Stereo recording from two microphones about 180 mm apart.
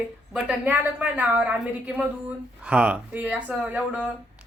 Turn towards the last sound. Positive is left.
turn(degrees=-10)  # may be behind; listen again after turning